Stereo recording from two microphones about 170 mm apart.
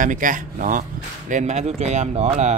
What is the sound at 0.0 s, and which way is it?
Speech, 50° right (ahead or behind).